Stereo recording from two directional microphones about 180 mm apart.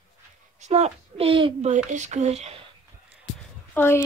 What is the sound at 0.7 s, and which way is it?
Speech, 35° right (ahead or behind).